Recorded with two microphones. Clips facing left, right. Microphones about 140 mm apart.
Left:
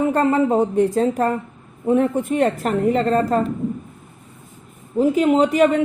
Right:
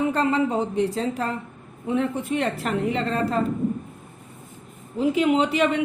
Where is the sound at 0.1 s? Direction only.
50° left (ahead or behind).